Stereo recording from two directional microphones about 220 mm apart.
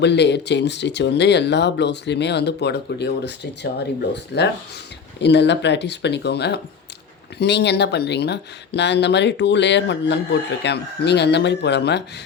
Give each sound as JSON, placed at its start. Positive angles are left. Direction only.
{"t": 0.0, "sound": "speech", "side_deg": 50}